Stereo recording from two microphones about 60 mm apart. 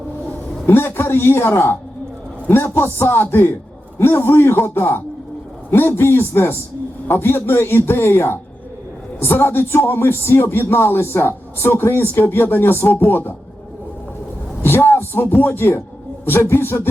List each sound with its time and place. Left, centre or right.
0.7 s speech: left
2.7 s speech: left
14.6 s speech: left